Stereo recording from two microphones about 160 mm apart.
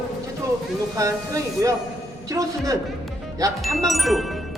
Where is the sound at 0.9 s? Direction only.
20° right (ahead or behind).